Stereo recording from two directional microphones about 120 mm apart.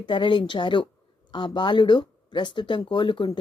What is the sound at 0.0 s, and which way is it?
A woman's voice, 45° left (ahead or behind).